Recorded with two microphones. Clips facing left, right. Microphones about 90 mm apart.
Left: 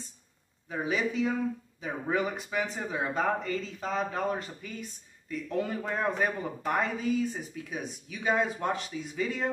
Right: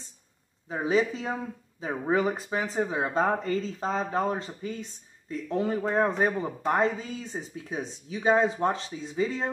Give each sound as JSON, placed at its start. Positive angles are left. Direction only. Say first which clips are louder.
{"t": 0.7, "sound": "speech", "louder": "right 5 dB", "side_deg": -30}